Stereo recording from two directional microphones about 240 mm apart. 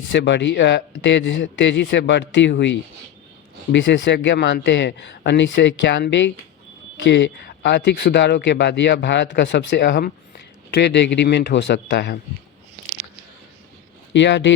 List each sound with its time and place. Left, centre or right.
0.1 s speech: left
14.1 s speech: left